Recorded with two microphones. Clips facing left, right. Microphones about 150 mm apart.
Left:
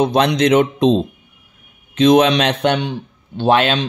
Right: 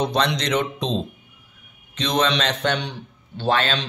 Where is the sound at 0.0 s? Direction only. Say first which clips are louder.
Left 8 dB; 55° left (ahead or behind).